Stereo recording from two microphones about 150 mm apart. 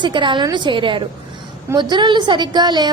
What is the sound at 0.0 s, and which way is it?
A woman's voice, 30° right (ahead or behind).